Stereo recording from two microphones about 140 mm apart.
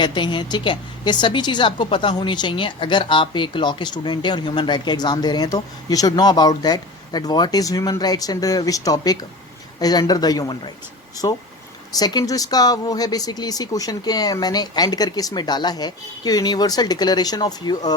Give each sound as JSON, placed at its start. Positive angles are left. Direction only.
{"t": 0.0, "sound": "a woman's voice", "side_deg": 35}